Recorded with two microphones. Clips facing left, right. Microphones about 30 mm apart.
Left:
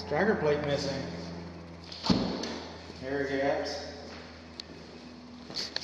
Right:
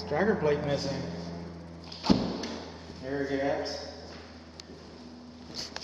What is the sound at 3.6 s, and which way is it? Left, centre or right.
Speech, centre.